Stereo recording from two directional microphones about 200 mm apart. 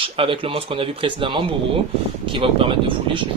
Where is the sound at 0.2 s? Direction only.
25° right (ahead or behind).